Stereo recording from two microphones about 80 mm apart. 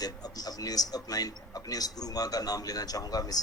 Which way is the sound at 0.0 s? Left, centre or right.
Left.